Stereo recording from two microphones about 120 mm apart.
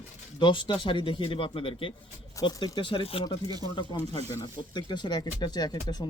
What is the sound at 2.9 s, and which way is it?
Speech, 50° left (ahead or behind).